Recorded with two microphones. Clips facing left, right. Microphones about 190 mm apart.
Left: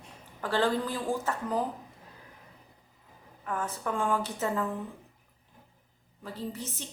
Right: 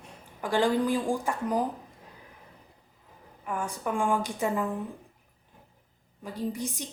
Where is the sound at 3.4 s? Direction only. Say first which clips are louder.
Right 1 dB; 15° right (ahead or behind).